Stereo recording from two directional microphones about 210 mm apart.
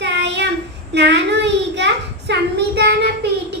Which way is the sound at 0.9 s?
55° right (ahead or behind).